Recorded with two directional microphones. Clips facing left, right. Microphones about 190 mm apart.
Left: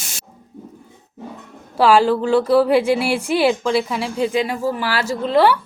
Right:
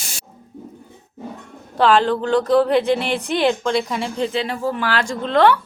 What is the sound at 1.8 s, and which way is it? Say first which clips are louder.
Frying: left 2 dB; 10° left (ahead or behind).